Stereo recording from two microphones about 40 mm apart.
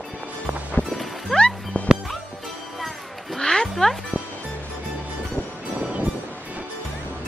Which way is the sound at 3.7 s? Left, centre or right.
Centre.